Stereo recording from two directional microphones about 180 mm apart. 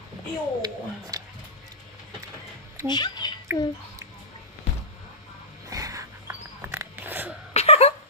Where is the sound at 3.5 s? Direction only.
15° right (ahead or behind).